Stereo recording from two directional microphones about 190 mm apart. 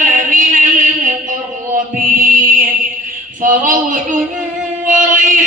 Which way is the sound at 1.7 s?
45° right (ahead or behind).